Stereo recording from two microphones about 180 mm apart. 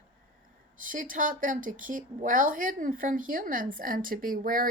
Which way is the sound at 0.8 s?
50° right (ahead or behind).